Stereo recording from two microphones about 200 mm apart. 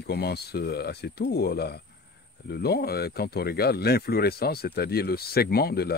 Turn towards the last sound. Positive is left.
turn(degrees=50)  # may be behind; listen again after turning